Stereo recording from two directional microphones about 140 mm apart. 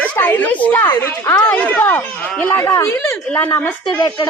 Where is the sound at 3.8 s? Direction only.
30° left (ahead or behind).